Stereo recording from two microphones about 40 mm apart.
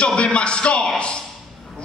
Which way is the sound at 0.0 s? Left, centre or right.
Left.